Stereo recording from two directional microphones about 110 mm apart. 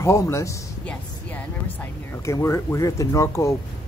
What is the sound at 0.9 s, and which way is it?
Speech, 15° left (ahead or behind).